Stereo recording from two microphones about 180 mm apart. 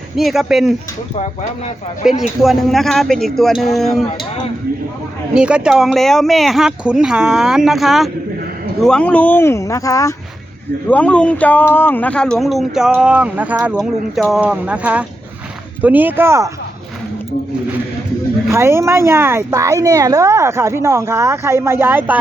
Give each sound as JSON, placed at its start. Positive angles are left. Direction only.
{"t": 0.2, "sound": "speech", "side_deg": 0}
{"t": 1.2, "sound": "speech", "side_deg": 40}
{"t": 2.0, "sound": "speech", "side_deg": -5}
{"t": 5.3, "sound": "speech", "side_deg": -5}
{"t": 10.8, "sound": "speech", "side_deg": 5}
{"t": 18.5, "sound": "speech", "side_deg": -15}